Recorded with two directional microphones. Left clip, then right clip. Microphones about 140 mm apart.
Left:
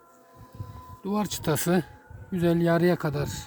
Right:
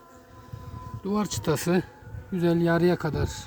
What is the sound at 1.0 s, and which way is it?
A man's voice, 55° left (ahead or behind).